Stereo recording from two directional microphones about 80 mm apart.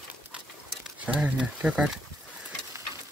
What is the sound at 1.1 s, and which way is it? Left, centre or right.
Speech, centre.